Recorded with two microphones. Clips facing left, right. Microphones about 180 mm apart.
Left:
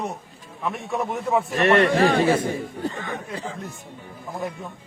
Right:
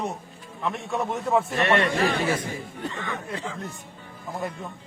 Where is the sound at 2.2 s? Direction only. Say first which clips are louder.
Left 6 dB; 30° left (ahead or behind).